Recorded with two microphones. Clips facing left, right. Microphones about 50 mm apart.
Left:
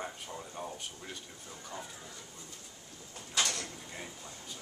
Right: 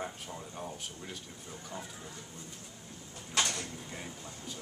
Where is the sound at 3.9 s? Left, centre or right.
Centre.